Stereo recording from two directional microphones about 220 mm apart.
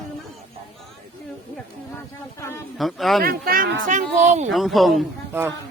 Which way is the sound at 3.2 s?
40° right (ahead or behind).